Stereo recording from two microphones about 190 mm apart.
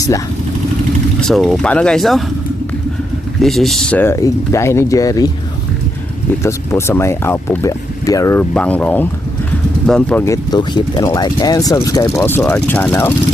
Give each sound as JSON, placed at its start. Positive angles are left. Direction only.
{"t": 1.2, "sound": "speech", "side_deg": 0}
{"t": 3.4, "sound": "speech", "side_deg": 0}
{"t": 6.4, "sound": "speech", "side_deg": 15}
{"t": 10.2, "sound": "speech", "side_deg": 20}